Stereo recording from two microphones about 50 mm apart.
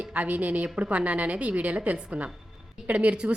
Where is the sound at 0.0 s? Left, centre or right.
Right.